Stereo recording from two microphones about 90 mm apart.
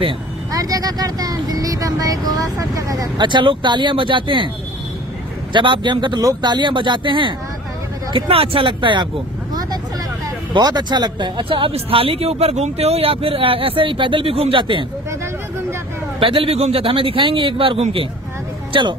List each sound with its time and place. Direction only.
0.5 s speech: 45° right (ahead or behind)
3.2 s speech: 60° right (ahead or behind)
5.5 s speech: 60° right (ahead or behind)
8.1 s speech: 90° right; by 9.1 s 65° right (ahead or behind)
10.5 s a man's voice: 50° right (ahead or behind)
16.2 s a man's voice: 90° right
18.7 s speech: 65° right (ahead or behind)